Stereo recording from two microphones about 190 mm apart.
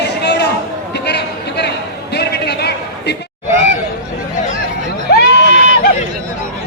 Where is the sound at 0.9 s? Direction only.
60° left (ahead or behind).